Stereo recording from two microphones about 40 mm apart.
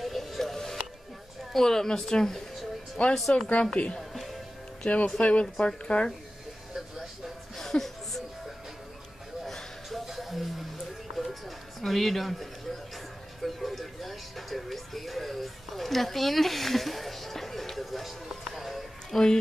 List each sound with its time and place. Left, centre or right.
0.0 s music: centre
1.5 s a woman's voice: centre
3.7 s speech: left
4.1 s music: centre
4.8 s speech: left
6.7 s a sound: centre
7.5 s a sound: centre
10.0 s a sound: centre
11.2 s music: centre
11.8 s speech: centre
13.4 s music: centre
19.1 s speech: centre